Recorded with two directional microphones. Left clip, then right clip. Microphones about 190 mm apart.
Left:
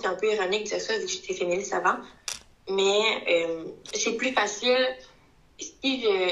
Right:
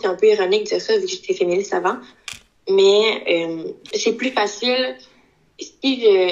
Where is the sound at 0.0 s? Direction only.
25° right (ahead or behind).